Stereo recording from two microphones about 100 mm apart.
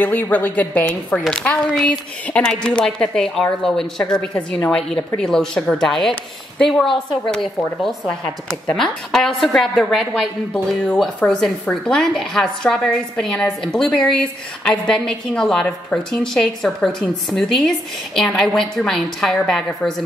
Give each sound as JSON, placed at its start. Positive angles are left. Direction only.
{"t": 0.0, "sound": "a woman's voice", "side_deg": 15}